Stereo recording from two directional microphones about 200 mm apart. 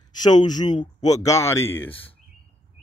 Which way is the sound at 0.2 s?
20° left (ahead or behind).